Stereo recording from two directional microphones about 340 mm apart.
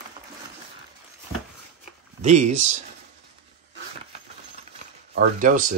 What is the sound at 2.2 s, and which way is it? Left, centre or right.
Speech, right.